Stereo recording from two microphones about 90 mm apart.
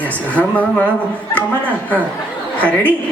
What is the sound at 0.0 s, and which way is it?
Speech, 15° left (ahead or behind).